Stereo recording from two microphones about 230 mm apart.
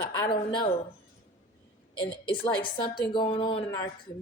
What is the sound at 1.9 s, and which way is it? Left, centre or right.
Speech, left.